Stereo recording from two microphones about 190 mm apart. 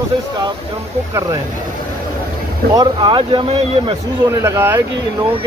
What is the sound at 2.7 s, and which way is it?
Speech, 25° right (ahead or behind).